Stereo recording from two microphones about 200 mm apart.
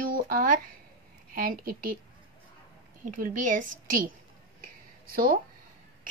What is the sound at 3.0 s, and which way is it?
A woman's voice, 40° right (ahead or behind).